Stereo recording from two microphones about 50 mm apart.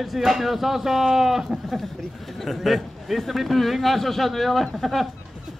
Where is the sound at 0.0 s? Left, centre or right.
Centre.